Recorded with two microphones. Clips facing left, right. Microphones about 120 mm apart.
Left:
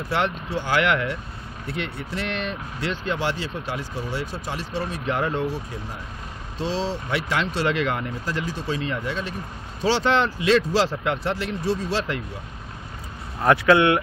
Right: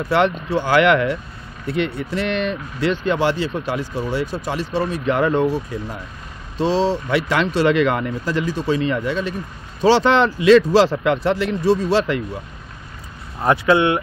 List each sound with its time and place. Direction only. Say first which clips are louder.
0.1 s speech: right 7 dB; 70° right (ahead or behind)
6.6 s speech: right 8 dB; 70° right (ahead or behind)
13.4 s speech: right 1 dB; 20° right (ahead or behind)